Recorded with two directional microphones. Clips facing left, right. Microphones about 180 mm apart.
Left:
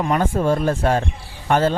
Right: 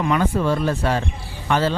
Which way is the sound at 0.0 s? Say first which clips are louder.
Left 1 dB; 45° left (ahead or behind).